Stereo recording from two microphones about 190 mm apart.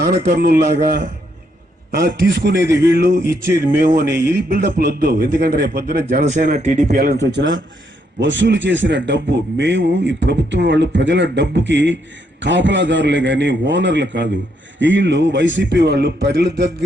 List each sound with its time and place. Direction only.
0.3 s a man's voice: 55° right (ahead or behind); by 6.9 s 35° right (ahead or behind)
6.9 s a man's voice: 50° right (ahead or behind)